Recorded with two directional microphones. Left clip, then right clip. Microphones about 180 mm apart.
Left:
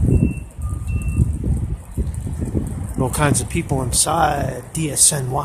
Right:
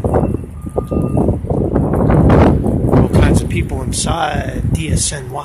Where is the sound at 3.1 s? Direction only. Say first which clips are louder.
Right 4 dB; 15° left (ahead or behind).